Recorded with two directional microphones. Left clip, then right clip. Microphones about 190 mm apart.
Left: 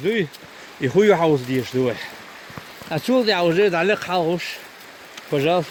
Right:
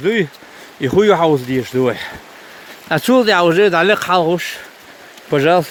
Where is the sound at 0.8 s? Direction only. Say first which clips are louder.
Right 4 dB; 25° right (ahead or behind).